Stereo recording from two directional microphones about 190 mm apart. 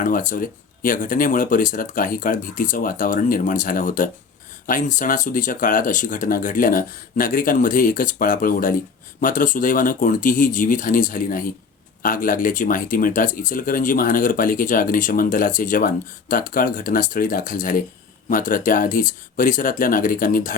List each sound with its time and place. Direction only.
0.0 s speech: 45° left (ahead or behind)